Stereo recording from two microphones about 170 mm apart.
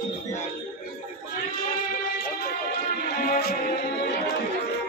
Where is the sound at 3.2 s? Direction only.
60° left (ahead or behind).